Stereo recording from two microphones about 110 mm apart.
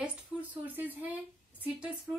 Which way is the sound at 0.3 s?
5° right (ahead or behind).